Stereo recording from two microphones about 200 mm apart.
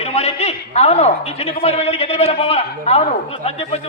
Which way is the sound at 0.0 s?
30° left (ahead or behind).